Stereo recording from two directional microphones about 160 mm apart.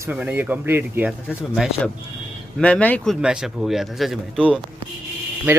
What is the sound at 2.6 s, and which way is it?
Speech, 10° left (ahead or behind).